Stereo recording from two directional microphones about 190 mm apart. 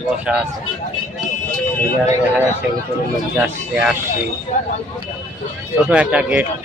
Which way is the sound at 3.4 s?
5° right (ahead or behind).